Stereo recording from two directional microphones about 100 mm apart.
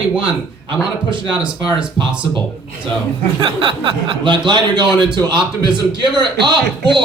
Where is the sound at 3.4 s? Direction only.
60° right (ahead or behind).